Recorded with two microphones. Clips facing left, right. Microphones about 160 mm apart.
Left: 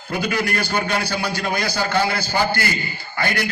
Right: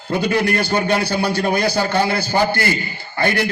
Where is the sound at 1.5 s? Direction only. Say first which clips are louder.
Right 5 dB; 55° right (ahead or behind).